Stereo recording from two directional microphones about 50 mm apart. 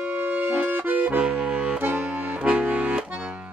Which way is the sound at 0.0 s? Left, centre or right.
Right.